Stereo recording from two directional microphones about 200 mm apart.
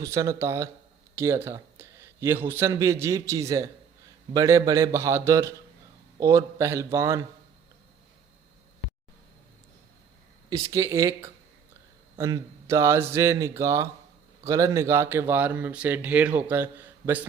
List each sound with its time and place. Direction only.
0.0 s a man's voice: 15° right (ahead or behind)
10.5 s speech: 15° right (ahead or behind)